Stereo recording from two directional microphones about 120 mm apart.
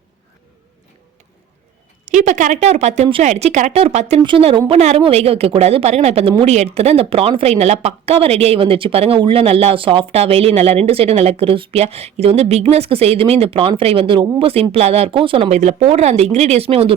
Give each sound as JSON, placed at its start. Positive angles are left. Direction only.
{"t": 2.0, "sound": "a woman's voice", "side_deg": -90}
{"t": 4.2, "sound": "speech", "side_deg": -45}
{"t": 4.7, "sound": "a woman's voice", "side_deg": -60}
{"t": 15.4, "sound": "speech", "side_deg": -75}
{"t": 15.9, "sound": "a woman's voice", "side_deg": -60}